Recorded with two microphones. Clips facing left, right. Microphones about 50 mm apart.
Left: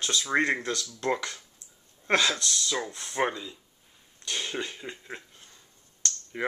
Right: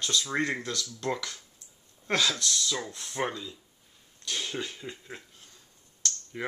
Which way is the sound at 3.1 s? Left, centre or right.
Centre.